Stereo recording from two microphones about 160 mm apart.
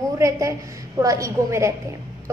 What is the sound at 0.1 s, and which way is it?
A woman's voice, 20° right (ahead or behind).